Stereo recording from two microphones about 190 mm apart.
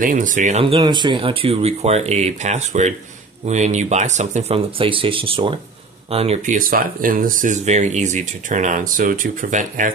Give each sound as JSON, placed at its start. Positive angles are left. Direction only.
{"t": 0.0, "sound": "speech", "side_deg": -45}